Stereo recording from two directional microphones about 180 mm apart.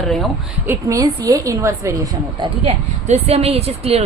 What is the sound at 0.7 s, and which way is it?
A woman's voice, 20° right (ahead or behind).